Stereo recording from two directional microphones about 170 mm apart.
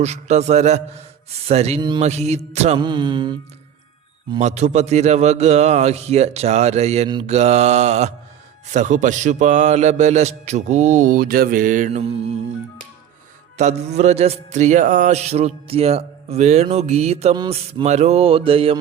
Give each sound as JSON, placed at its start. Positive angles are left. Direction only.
{"t": 0.0, "sound": "mantra", "side_deg": -40}
{"t": 2.7, "sound": "music", "side_deg": -25}
{"t": 4.4, "sound": "mantra", "side_deg": -40}
{"t": 8.7, "sound": "a man's voice", "side_deg": -45}
{"t": 13.6, "sound": "mantra", "side_deg": -40}
{"t": 17.3, "sound": "music", "side_deg": -25}
{"t": 17.8, "sound": "mantra", "side_deg": -40}